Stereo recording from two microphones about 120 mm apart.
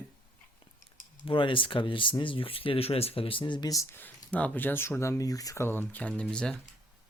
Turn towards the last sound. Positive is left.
turn(degrees=10)  # may be behind; listen again after turning